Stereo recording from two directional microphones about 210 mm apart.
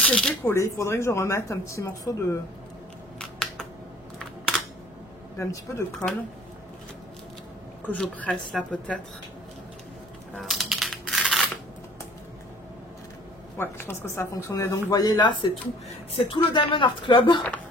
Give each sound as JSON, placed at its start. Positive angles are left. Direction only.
{"t": 0.0, "sound": "speech", "side_deg": 5}
{"t": 3.2, "sound": "scissors", "side_deg": 5}
{"t": 5.4, "sound": "speech", "side_deg": 15}
{"t": 7.8, "sound": "a woman's voice", "side_deg": 5}
{"t": 10.3, "sound": "a sound", "side_deg": 0}
{"t": 13.6, "sound": "speech", "side_deg": 10}